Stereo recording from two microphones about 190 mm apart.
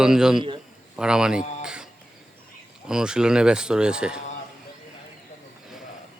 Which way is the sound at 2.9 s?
5° right (ahead or behind).